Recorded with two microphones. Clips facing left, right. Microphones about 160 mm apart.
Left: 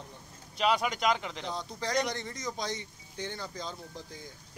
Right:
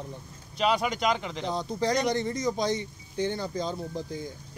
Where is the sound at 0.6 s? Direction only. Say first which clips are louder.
Right 2 dB; 5° left (ahead or behind).